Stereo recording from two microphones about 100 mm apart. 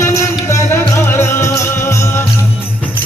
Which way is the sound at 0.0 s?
30° left (ahead or behind).